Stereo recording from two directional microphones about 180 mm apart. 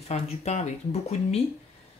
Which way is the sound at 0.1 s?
40° left (ahead or behind).